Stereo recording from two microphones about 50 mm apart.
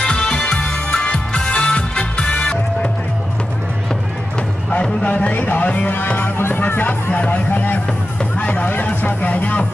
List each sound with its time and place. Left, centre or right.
0.0 s music: centre
5.0 s music: left